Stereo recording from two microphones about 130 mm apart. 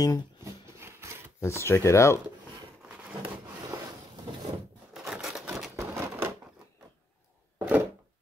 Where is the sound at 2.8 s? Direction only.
10° right (ahead or behind).